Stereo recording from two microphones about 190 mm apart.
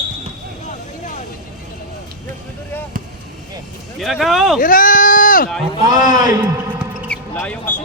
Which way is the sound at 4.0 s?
Centre (ahead or behind).